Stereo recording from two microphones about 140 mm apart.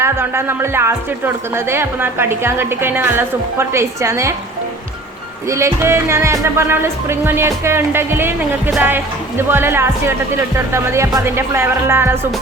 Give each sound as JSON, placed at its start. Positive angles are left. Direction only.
{"t": 0.0, "sound": "a woman's voice", "side_deg": -15}
{"t": 5.5, "sound": "a woman's voice", "side_deg": -20}